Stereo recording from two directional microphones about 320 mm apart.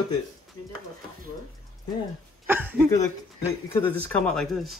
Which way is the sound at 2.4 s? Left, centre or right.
Centre.